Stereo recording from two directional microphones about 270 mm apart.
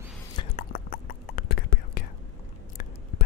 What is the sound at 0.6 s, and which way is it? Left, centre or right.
Whispering, left.